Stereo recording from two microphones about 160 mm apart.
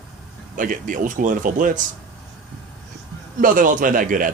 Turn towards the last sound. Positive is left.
turn(degrees=-55)  # may be behind; listen again after turning